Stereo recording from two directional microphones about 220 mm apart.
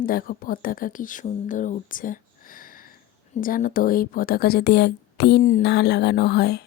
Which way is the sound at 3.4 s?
40° left (ahead or behind).